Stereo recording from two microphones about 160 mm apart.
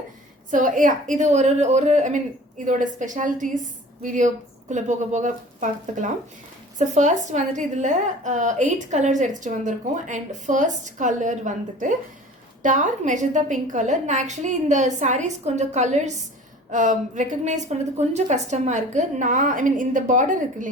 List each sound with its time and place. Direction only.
0.5 s a woman's voice: 55° right (ahead or behind)